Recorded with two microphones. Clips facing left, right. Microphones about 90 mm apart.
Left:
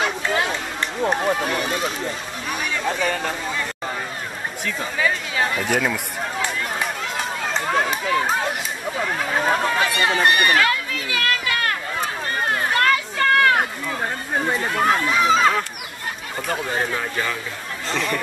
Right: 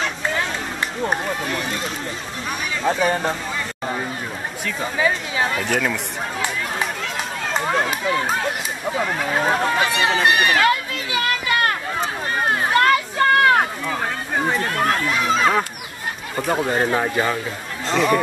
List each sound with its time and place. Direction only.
0.0 s run: 5° left (ahead or behind)
1.2 s speech: 10° left (ahead or behind)
3.1 s a man's voice: 25° right (ahead or behind)
4.9 s speech: 15° right (ahead or behind)
5.4 s speech: centre (ahead or behind)
7.6 s a sound: centre (ahead or behind)
8.9 s speech: centre (ahead or behind)
10.6 s chatter: 25° right (ahead or behind)
12.8 s a sound: 25° right (ahead or behind)
14.5 s speech: 5° left (ahead or behind)
16.5 s a man's voice: 25° right (ahead or behind)
17.9 s speech: 5° right (ahead or behind)